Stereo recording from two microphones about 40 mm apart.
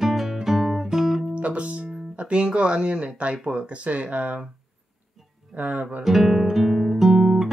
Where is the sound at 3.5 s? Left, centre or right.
Right.